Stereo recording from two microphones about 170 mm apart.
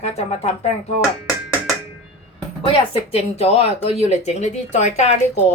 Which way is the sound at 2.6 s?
35° left (ahead or behind).